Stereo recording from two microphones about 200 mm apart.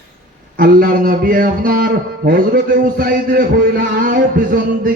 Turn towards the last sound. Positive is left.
turn(degrees=-45)  # may be behind; listen again after turning